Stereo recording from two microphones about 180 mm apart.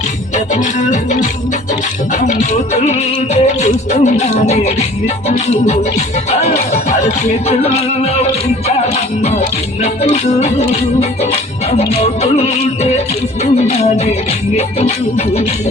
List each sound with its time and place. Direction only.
0.3 s music: 45° left (ahead or behind)
9.2 s music: 35° left (ahead or behind)
12.2 s music: 35° left (ahead or behind)